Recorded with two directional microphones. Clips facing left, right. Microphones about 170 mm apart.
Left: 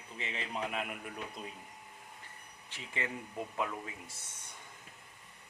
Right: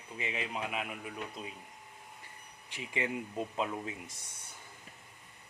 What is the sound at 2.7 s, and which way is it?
Speech, 15° right (ahead or behind).